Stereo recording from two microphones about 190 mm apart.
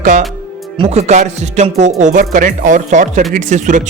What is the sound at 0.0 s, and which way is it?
Speech, 40° right (ahead or behind).